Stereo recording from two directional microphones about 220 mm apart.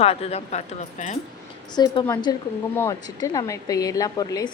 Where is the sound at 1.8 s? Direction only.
15° left (ahead or behind).